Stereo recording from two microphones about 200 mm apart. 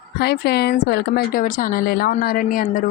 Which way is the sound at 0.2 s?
55° left (ahead or behind).